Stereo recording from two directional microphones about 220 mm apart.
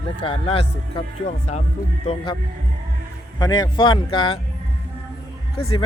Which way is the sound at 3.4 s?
20° left (ahead or behind).